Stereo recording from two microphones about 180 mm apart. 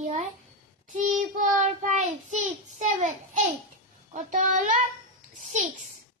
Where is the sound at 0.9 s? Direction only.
45° right (ahead or behind).